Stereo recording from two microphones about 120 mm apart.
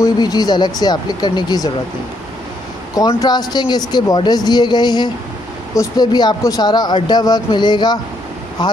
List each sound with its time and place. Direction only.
0.0 s speech: 35° left (ahead or behind)
3.1 s speech: 35° left (ahead or behind)